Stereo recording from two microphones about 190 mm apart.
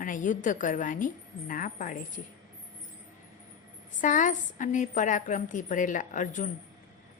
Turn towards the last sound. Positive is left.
turn(degrees=40)  # may be behind; listen again after turning